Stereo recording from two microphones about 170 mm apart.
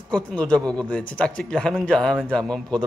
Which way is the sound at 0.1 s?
5° left (ahead or behind).